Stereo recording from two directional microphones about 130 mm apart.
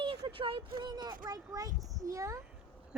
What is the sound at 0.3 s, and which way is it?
Speech, 45° right (ahead or behind).